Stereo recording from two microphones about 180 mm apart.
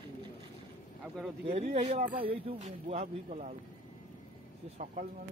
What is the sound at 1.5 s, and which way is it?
Speech, 40° right (ahead or behind).